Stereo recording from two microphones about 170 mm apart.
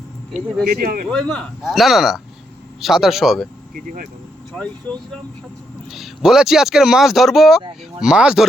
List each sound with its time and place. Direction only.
0.7 s speech: 60° right (ahead or behind)
1.3 s speech: centre (ahead or behind)
3.8 s speech: 55° right (ahead or behind)
4.5 s speech: 5° left (ahead or behind)